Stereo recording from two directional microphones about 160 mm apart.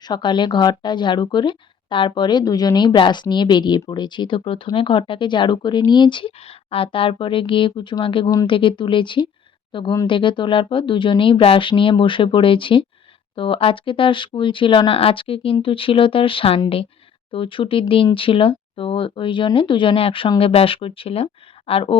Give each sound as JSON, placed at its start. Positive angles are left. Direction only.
{"t": 0.1, "sound": "a woman's voice", "side_deg": 30}
{"t": 8.3, "sound": "a woman's voice", "side_deg": 20}